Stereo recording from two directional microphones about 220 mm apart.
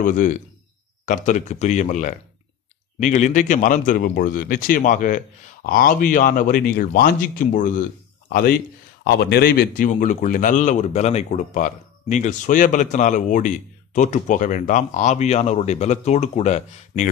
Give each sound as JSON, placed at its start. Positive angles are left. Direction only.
{"t": 0.0, "sound": "a man's voice", "side_deg": 35}